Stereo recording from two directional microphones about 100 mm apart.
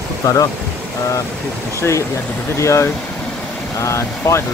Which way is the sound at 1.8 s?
30° left (ahead or behind).